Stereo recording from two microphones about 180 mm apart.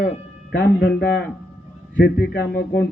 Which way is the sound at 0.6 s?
65° left (ahead or behind).